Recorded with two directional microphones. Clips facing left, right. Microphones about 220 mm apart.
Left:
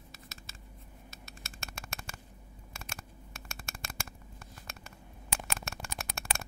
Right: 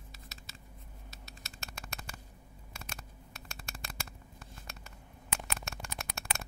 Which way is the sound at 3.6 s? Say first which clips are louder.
Left 1 dB; 50° left (ahead or behind).